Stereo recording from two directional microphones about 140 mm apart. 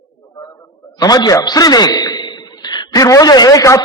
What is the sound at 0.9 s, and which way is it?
A man's voice, 30° left (ahead or behind).